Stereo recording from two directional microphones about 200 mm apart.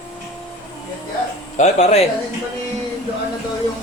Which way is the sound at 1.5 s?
35° left (ahead or behind).